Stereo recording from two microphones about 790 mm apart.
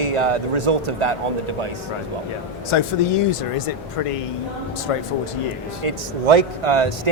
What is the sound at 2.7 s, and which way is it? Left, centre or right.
A man's voice, left.